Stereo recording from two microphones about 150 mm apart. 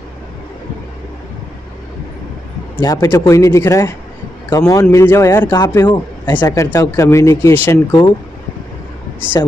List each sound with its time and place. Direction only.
2.8 s speech: 20° left (ahead or behind)